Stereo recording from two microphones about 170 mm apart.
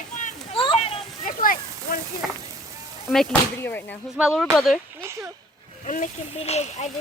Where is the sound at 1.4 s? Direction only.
55° left (ahead or behind).